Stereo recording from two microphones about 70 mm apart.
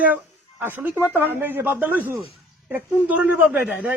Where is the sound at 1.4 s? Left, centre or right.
Right.